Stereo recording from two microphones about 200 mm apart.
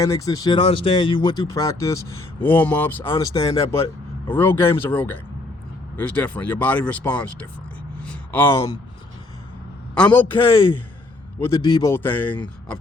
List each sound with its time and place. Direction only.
0.0 s a man's voice: 15° left (ahead or behind)
4.3 s a man's voice: 10° left (ahead or behind)
9.9 s a man's voice: 5° left (ahead or behind)
10.2 s a man's voice: 25° left (ahead or behind); by 12.4 s 10° left (ahead or behind)